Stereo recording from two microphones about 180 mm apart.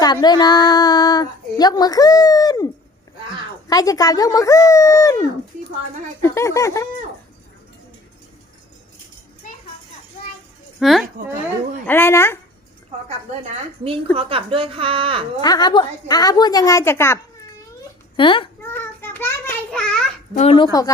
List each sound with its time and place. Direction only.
0.0 s a woman's voice: 25° left (ahead or behind)
3.7 s speech: 20° left (ahead or behind)
6.2 s speech: 15° left (ahead or behind)
10.8 s speech: centre (ahead or behind)
11.9 s speech: 10° left (ahead or behind)
13.1 s speech: 35° right (ahead or behind)
15.4 s a woman's voice: 20° left (ahead or behind)
18.2 s a woman's voice: 30° left (ahead or behind)
18.6 s child singing: 10° left (ahead or behind)
20.3 s speech: 35° left (ahead or behind)